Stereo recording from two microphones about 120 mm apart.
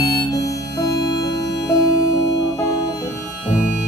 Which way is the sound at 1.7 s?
30° left (ahead or behind).